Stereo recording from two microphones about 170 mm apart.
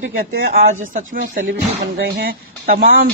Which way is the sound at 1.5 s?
75° right (ahead or behind).